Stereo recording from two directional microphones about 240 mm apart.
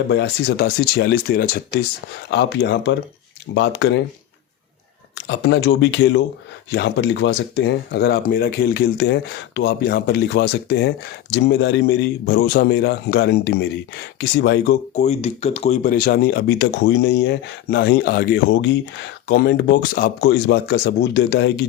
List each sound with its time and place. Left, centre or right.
0.1 s speech: left
5.1 s speech: left
14.9 s speech: left